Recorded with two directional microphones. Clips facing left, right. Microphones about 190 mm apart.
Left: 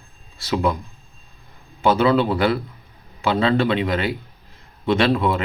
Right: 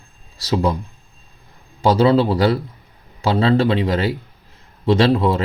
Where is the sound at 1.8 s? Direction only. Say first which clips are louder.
Right 3 dB; 35° right (ahead or behind).